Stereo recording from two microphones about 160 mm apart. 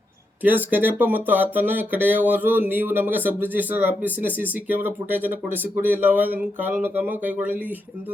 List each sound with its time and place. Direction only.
0.4 s speech: 10° right (ahead or behind)